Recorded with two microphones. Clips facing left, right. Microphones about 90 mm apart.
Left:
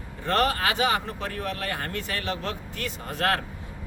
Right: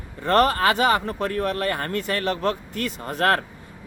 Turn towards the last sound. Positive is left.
turn(degrees=-45)  # may be behind; listen again after turning